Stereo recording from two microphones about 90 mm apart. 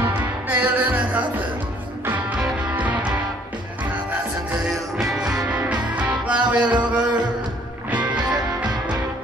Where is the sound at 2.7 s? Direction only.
15° right (ahead or behind).